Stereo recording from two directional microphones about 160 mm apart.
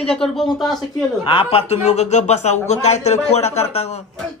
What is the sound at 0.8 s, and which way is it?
Speech, 30° left (ahead or behind).